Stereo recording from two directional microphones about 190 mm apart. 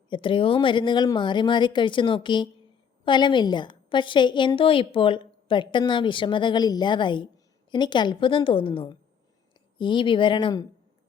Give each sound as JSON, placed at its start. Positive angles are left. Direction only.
{"t": 0.1, "sound": "a woman's voice", "side_deg": 25}